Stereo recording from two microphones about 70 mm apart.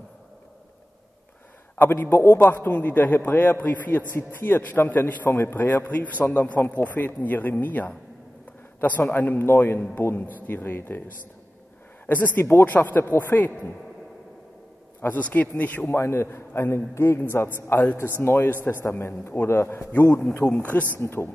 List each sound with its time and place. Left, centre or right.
1.8 s a man's voice: left
12.1 s a man's voice: left
15.0 s a man's voice: left
20.5 s a man's voice: left
21.0 s a man's voice: left